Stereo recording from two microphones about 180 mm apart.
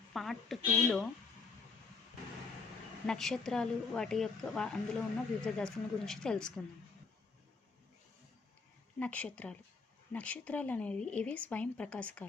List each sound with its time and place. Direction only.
0.1 s a woman's voice: centre (ahead or behind)
3.1 s a woman's voice: centre (ahead or behind)
9.0 s speech: 5° left (ahead or behind)